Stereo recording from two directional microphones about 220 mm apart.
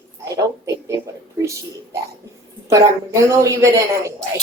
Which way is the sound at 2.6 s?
15° right (ahead or behind).